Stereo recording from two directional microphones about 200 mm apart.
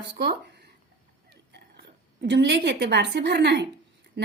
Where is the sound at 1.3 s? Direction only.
55° right (ahead or behind).